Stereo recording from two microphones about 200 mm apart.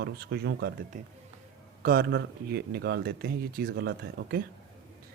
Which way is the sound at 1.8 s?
50° right (ahead or behind).